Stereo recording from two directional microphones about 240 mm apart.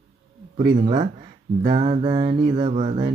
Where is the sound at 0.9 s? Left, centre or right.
Centre.